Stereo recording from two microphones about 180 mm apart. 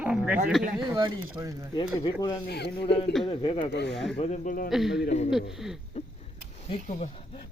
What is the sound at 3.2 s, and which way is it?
Speech, 30° left (ahead or behind).